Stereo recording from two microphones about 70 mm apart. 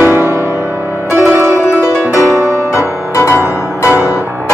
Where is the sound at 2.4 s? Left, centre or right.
Right.